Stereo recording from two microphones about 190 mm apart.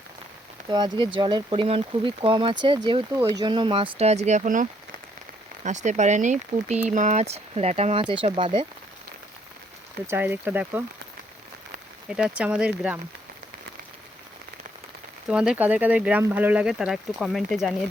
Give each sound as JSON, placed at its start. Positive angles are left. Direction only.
{"t": 0.7, "sound": "speech", "side_deg": -20}
{"t": 10.1, "sound": "speech", "side_deg": -10}
{"t": 12.1, "sound": "speech", "side_deg": -5}
{"t": 15.3, "sound": "speech", "side_deg": -5}